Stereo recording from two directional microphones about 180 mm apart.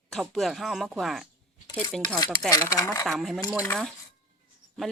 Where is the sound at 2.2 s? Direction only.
20° left (ahead or behind).